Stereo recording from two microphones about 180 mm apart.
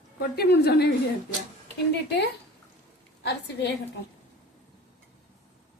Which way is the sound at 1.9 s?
75° left (ahead or behind).